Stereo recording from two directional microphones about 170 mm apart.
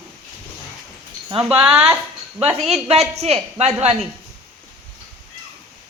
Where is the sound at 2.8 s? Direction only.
40° right (ahead or behind).